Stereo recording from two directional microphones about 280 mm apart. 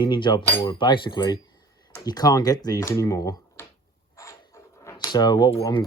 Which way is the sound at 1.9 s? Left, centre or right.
Centre.